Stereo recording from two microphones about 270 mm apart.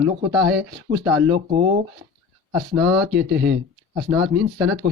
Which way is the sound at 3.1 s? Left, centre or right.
Right.